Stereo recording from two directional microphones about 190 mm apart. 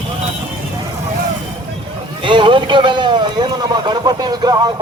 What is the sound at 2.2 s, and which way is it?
Speech, 25° right (ahead or behind).